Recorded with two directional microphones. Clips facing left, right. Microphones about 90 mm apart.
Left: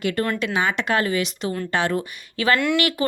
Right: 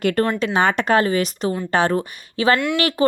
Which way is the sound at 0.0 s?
45° right (ahead or behind).